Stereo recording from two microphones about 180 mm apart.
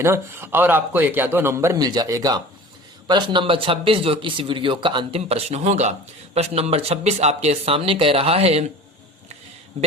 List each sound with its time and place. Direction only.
0.0 s a man's voice: 15° right (ahead or behind); by 8.6 s 35° right (ahead or behind)
9.7 s a man's voice: 40° right (ahead or behind)